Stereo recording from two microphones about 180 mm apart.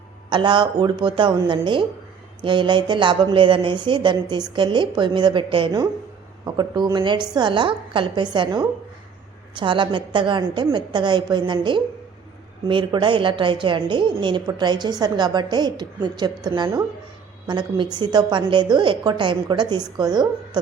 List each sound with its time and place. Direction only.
0.3 s a woman's voice: 25° right (ahead or behind)